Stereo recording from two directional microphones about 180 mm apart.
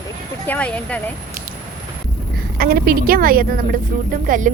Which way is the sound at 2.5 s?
55° right (ahead or behind).